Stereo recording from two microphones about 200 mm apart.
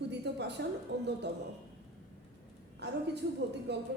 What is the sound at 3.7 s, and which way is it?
Speech, 60° right (ahead or behind).